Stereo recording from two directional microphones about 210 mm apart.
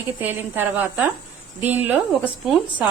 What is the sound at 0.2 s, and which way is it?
A woman's voice, 10° right (ahead or behind).